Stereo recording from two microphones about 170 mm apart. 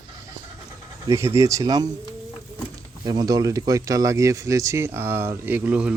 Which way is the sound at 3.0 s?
20° right (ahead or behind).